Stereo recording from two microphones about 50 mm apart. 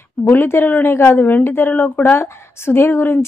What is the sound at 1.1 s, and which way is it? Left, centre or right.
Speech, left.